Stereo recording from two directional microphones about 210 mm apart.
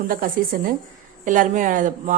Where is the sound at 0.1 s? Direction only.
45° right (ahead or behind).